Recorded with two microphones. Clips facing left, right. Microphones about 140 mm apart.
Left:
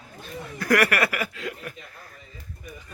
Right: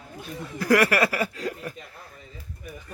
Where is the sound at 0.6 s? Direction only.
25° right (ahead or behind).